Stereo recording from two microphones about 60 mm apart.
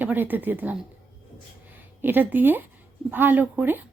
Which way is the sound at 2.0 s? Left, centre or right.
Right.